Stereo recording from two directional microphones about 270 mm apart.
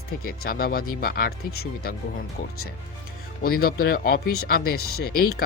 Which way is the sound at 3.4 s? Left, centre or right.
Left.